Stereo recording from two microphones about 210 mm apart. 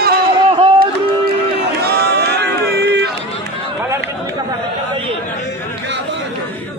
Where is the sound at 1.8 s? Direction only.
50° right (ahead or behind).